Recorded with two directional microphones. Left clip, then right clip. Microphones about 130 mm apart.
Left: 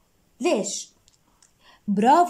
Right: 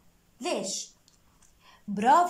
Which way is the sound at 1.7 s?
35° left (ahead or behind).